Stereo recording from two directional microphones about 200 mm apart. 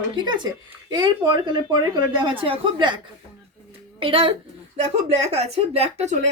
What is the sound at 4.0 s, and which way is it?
Speech, 25° right (ahead or behind).